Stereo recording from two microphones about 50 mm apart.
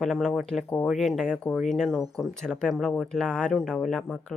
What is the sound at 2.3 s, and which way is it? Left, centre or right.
Speech, centre.